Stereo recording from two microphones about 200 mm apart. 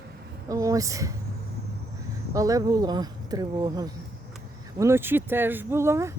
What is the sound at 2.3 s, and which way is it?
Speech, 15° right (ahead or behind).